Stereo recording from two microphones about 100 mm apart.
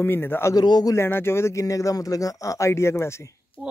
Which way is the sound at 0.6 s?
40° left (ahead or behind).